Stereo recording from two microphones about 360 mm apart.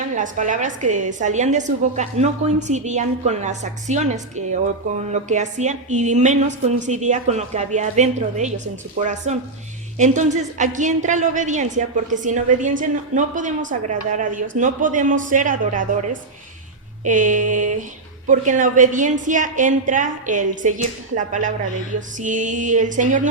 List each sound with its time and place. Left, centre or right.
0.1 s a woman's voice: right
17.0 s a woman's voice: right